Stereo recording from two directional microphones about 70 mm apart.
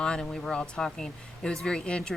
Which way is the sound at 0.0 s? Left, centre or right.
Centre.